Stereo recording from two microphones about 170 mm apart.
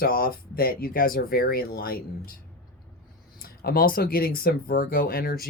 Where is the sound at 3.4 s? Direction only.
60° left (ahead or behind).